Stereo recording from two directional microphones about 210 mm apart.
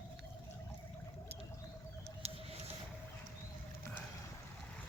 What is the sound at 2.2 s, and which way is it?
Patter, 30° right (ahead or behind).